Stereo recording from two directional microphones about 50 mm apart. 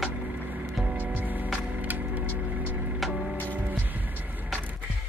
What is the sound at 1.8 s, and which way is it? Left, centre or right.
Wood, right.